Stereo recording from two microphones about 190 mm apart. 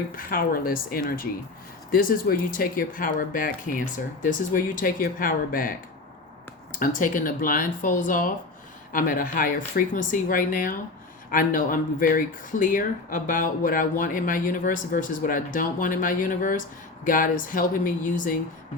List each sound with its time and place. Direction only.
0.2 s speech: 50° left (ahead or behind)